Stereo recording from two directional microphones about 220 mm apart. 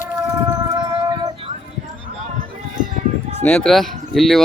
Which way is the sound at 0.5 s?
15° right (ahead or behind).